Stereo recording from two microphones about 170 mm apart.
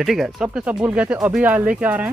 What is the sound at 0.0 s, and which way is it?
Speech, centre (ahead or behind).